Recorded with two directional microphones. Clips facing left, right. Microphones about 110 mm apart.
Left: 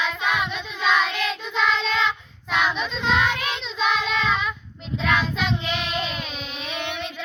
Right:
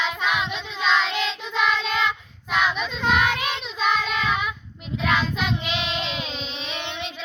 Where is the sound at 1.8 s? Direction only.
10° right (ahead or behind).